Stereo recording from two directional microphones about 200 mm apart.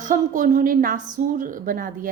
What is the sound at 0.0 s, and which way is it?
A woman's voice, 40° right (ahead or behind).